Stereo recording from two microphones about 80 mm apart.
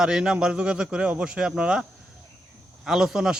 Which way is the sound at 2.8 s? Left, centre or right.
Centre.